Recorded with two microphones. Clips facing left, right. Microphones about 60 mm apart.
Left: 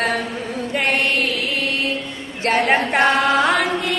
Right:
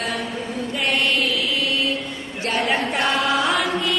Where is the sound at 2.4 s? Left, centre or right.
Left.